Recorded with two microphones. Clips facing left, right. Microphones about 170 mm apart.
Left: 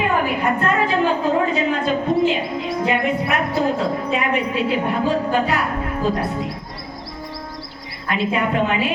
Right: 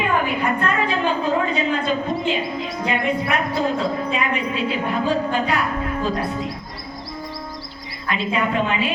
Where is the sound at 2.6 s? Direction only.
60° left (ahead or behind).